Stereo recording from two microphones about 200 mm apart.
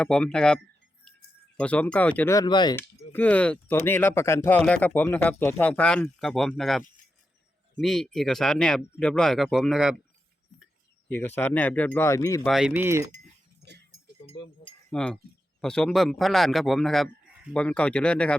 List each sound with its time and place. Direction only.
0.0 s a man's voice: 5° left (ahead or behind); by 2.7 s 20° left (ahead or behind)
3.1 s a man's voice: 10° left (ahead or behind)
11.1 s speech: 10° left (ahead or behind)
12.4 s speech: centre (ahead or behind)
14.3 s speech: 25° left (ahead or behind)
14.8 s wind chime: 5° left (ahead or behind)
15.6 s a man's voice: 5° left (ahead or behind)